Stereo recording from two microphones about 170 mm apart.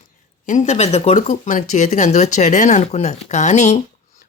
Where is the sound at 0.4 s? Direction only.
45° left (ahead or behind).